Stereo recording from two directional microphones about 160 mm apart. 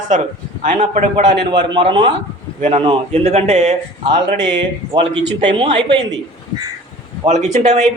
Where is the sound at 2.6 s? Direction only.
45° right (ahead or behind).